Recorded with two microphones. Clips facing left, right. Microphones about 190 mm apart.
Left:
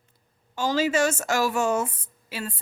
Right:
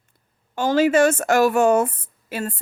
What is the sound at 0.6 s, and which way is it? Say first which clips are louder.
A woman's voice: right 6 dB; 55° right (ahead or behind).